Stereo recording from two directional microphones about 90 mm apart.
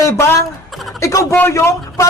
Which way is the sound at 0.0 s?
30° left (ahead or behind).